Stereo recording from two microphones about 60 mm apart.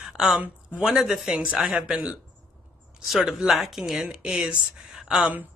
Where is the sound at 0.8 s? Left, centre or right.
Centre.